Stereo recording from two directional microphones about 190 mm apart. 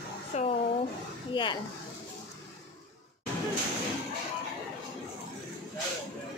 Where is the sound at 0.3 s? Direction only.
40° left (ahead or behind).